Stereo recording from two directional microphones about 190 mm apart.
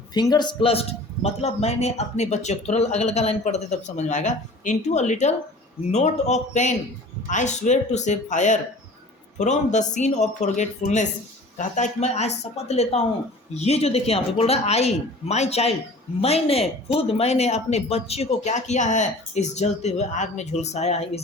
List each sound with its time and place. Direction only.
0.1 s speech: 20° left (ahead or behind)